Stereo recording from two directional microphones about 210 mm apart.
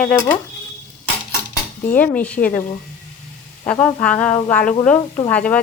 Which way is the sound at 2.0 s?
5° left (ahead or behind).